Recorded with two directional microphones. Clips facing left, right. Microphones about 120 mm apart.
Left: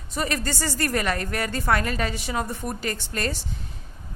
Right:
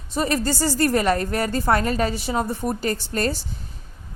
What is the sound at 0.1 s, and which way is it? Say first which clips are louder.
A woman's voice: right 5 dB; 30° right (ahead or behind).